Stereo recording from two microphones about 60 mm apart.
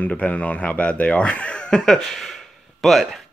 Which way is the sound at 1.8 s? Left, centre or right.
Centre.